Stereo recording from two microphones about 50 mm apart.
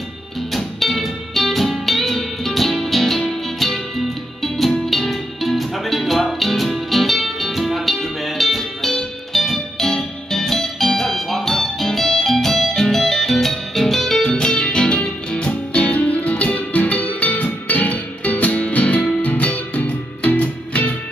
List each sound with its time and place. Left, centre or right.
0.5 s music: centre; by 20.9 s left